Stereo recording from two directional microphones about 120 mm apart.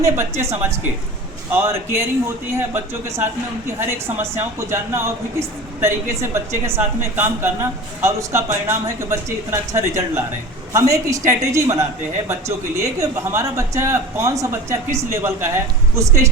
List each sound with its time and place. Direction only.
0.0 s speech: 25° right (ahead or behind)
13.0 s speech: 25° right (ahead or behind)